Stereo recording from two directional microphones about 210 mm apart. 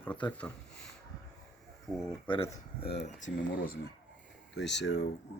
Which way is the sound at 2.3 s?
25° left (ahead or behind).